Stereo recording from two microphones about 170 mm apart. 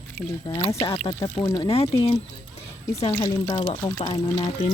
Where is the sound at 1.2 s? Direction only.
20° left (ahead or behind).